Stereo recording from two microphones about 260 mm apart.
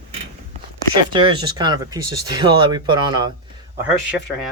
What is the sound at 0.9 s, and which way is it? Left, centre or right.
Speech, centre.